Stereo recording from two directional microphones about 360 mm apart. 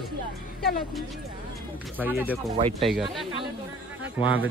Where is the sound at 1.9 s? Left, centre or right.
Centre.